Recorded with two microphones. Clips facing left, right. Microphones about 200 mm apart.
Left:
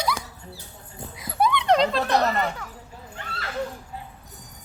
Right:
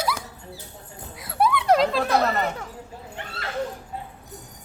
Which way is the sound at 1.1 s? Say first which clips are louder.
Right 1 dB; centre (ahead or behind).